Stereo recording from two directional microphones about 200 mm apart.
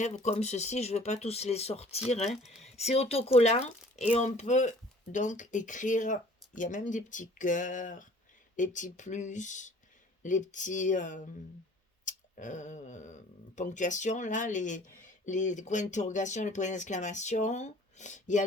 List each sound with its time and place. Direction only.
0.0 s speech: 35° left (ahead or behind)
2.3 s speech: centre (ahead or behind)
2.6 s speech: 35° left (ahead or behind)